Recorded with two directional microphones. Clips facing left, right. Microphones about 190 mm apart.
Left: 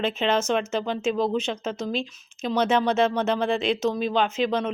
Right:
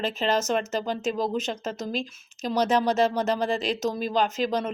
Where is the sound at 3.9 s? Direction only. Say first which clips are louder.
Left 2 dB; centre (ahead or behind).